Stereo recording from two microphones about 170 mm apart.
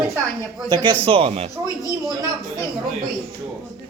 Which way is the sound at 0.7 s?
25° right (ahead or behind).